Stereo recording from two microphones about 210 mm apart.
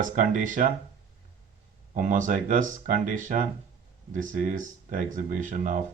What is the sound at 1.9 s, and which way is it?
Speech, 35° right (ahead or behind).